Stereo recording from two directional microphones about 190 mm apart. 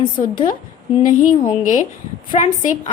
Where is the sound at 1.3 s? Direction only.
25° left (ahead or behind).